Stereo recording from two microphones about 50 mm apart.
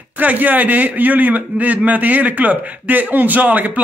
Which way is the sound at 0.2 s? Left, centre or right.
Right.